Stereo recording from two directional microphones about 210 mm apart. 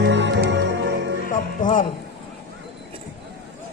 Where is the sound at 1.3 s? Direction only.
40° left (ahead or behind).